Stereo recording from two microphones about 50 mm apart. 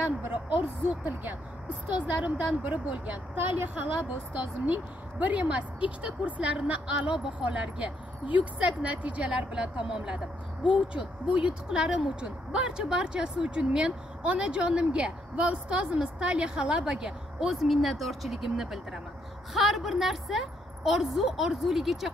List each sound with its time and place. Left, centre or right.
0.3 s speech: right
2.0 s a woman's voice: right
5.2 s a woman's voice: right; by 22.1 s centre